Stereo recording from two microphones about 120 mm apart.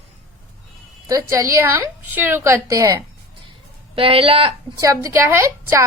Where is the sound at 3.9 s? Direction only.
50° right (ahead or behind).